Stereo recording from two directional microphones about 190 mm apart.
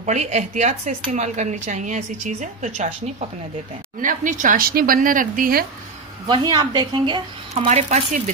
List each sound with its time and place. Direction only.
0.0 s a woman's voice: 35° right (ahead or behind)
6.2 s a woman's voice: 25° right (ahead or behind)
7.7 s a woman's voice: 35° right (ahead or behind)